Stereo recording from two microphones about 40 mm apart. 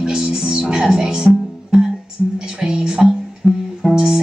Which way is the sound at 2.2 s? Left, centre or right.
Centre.